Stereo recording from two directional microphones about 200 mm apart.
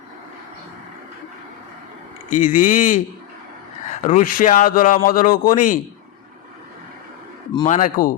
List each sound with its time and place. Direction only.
2.3 s speech: 40° left (ahead or behind)
7.6 s speech: 40° left (ahead or behind)